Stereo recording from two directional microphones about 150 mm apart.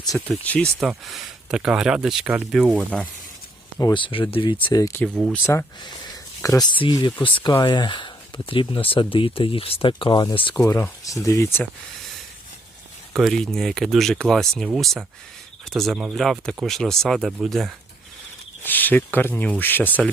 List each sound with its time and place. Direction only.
0.1 s speech: 10° left (ahead or behind)
0.8 s speech: centre (ahead or behind)
3.9 s speech: 35° left (ahead or behind)
5.0 s speech: 5° left (ahead or behind)
5.4 s speech: 15° left (ahead or behind); by 10.5 s 30° left (ahead or behind)
10.5 s speech: 15° left (ahead or behind)
13.1 s speech: centre (ahead or behind)
18.6 s speech: 10° left (ahead or behind)